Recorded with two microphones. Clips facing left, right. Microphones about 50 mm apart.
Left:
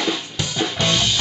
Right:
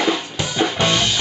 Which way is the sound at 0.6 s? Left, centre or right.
Centre.